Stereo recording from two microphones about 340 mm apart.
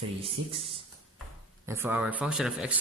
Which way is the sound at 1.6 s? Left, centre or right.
Centre.